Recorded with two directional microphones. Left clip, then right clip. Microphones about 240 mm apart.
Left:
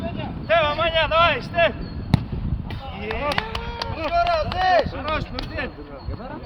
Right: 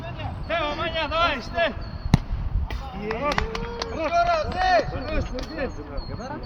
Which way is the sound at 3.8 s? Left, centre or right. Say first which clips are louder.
Even; left.